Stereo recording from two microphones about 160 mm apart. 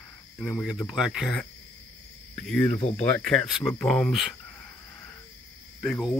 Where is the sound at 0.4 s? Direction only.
5° left (ahead or behind).